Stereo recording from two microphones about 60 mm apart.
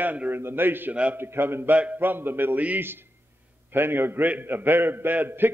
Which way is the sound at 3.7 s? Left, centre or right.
Right.